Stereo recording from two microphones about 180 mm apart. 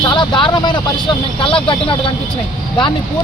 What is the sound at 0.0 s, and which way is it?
Speech, 25° left (ahead or behind).